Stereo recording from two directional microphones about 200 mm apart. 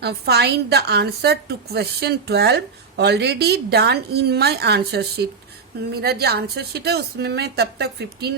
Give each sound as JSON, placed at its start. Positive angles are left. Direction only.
{"t": 0.0, "sound": "a woman's voice", "side_deg": -55}